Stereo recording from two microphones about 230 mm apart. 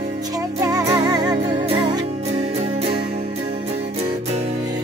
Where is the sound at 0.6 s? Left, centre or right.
Centre.